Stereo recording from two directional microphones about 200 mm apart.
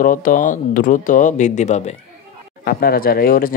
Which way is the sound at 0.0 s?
40° left (ahead or behind).